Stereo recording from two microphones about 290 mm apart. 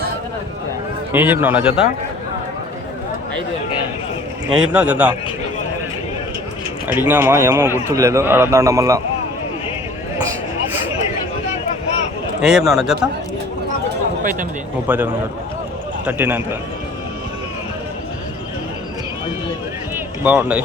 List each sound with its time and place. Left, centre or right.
1.1 s a man's voice: centre
4.4 s a man's voice: centre
6.8 s a man's voice: centre
12.4 s a man's voice: centre
14.2 s speech: right
14.8 s a man's voice: centre
20.2 s a man's voice: centre